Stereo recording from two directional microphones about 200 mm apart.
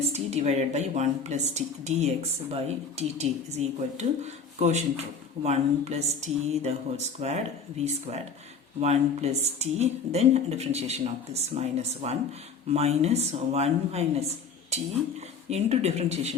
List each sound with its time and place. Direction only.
0.1 s speech: 35° right (ahead or behind)
15.4 s speech: 30° right (ahead or behind)